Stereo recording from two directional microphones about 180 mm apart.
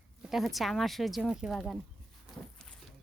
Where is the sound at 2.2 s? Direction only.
Centre (ahead or behind).